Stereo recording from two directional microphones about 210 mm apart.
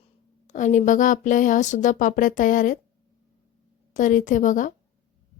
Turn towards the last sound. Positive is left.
turn(degrees=40)  # may be behind; listen again after turning